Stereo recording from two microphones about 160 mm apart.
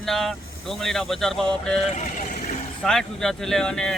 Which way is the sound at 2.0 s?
50° left (ahead or behind).